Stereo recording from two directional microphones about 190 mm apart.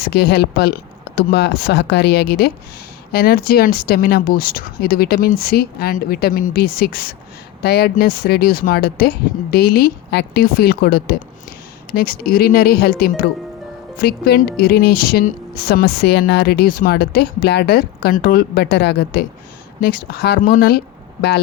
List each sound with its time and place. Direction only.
0.0 s a woman's voice: 55° left (ahead or behind)